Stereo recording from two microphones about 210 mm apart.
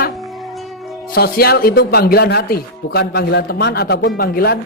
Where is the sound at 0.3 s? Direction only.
Centre (ahead or behind).